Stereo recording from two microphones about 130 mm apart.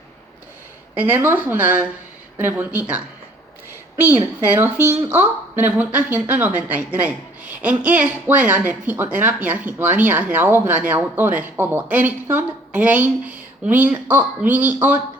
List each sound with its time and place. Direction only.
0.9 s speech: 15° right (ahead or behind)
3.7 s a sound: 15° right (ahead or behind)
4.5 s speech: 20° right (ahead or behind)